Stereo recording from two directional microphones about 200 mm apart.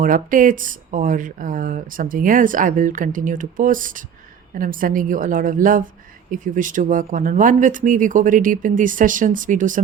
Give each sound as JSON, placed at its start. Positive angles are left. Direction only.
{"t": 0.0, "sound": "a woman's voice", "side_deg": -40}